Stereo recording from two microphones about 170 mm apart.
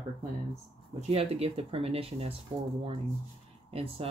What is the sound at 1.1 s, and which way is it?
Speech, 35° right (ahead or behind).